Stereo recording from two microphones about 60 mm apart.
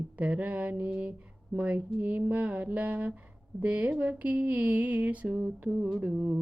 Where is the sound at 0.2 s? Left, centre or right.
Right.